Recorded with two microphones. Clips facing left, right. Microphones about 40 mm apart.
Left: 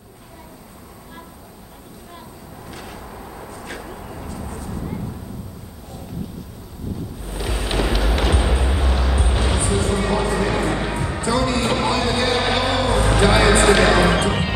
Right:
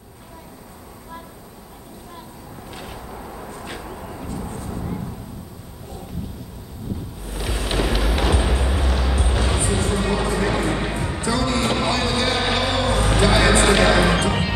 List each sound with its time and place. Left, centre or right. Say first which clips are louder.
3.5 s vehicle: left 2 dB; right
7.2 s vehicle: even; centre
9.4 s music: left 1 dB; centre
11.5 s a sound: left 1 dB; centre
12.1 s music: left 2 dB; centre
12.4 s a sound: left 2 dB; centre
13.2 s music: left 2 dB; centre
13.6 s music: left 2 dB; centre